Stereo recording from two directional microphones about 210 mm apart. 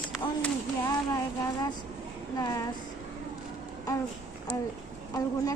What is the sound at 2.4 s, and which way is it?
Speech, 15° left (ahead or behind).